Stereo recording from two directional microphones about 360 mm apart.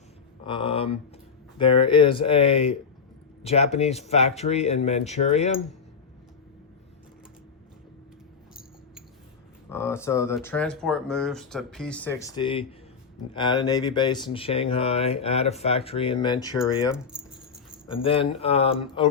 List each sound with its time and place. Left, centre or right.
0.4 s speech: centre
9.6 s speech: centre
16.9 s keys jangling: centre
17.8 s speech: centre